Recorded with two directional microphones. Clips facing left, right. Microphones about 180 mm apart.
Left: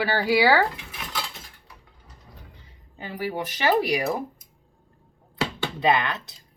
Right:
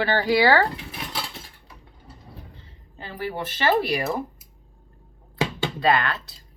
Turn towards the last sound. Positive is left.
turn(degrees=20)  # may be behind; listen again after turning